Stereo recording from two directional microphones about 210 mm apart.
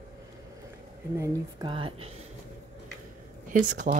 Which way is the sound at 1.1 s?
20° right (ahead or behind).